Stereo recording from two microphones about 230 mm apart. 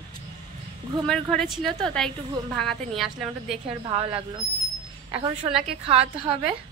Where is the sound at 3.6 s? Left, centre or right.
Right.